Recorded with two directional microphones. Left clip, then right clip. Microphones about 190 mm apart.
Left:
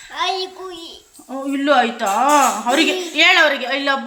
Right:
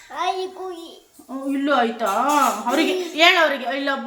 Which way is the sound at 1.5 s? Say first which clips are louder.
Left 4 dB; 30° left (ahead or behind).